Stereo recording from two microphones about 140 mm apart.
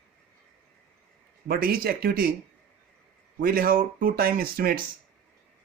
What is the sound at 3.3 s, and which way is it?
Speech, 90° right.